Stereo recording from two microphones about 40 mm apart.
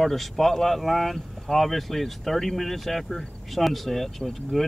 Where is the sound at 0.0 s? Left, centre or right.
Centre.